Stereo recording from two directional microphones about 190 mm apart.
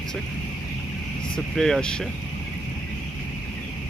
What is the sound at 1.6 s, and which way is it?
Speech, centre (ahead or behind).